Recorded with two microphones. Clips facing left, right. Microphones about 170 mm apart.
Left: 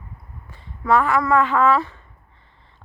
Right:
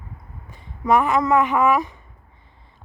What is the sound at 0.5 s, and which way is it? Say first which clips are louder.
Speech: even; 15° right (ahead or behind).